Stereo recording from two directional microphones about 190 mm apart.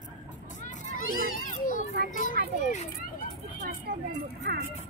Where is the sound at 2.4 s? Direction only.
55° right (ahead or behind).